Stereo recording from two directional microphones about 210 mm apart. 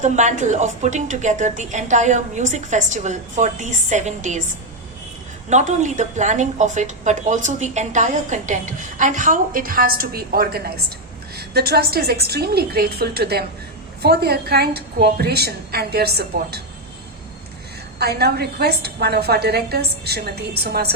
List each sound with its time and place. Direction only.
0.0 s a woman's voice: 35° right (ahead or behind)
5.5 s a woman's voice: 35° right (ahead or behind); by 16.6 s 50° right (ahead or behind)
18.0 s a woman's voice: 50° right (ahead or behind)